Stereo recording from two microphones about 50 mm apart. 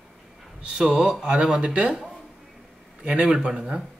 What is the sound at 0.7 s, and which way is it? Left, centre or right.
Speech, centre.